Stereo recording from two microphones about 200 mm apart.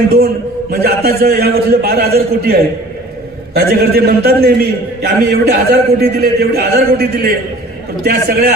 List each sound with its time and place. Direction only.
0.7 s a man's voice: 50° right (ahead or behind)